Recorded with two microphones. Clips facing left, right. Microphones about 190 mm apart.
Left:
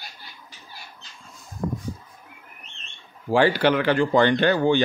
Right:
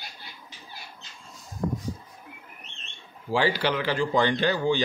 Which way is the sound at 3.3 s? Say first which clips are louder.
Left 6 dB; 55° left (ahead or behind).